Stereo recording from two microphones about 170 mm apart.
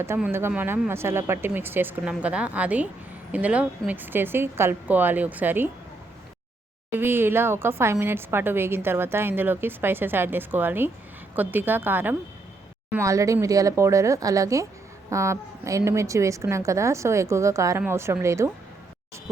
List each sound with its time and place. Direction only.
0.0 s a woman's voice: 15° right (ahead or behind)
6.9 s a woman's voice: 10° right (ahead or behind)